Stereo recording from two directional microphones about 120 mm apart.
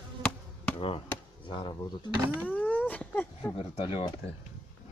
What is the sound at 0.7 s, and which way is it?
Speech, 50° left (ahead or behind).